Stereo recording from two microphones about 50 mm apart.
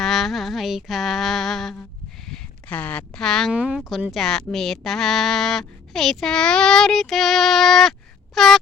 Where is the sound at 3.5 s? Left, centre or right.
Right.